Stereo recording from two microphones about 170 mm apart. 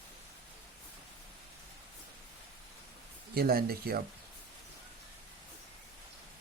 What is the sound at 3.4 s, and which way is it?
Speech, 65° right (ahead or behind).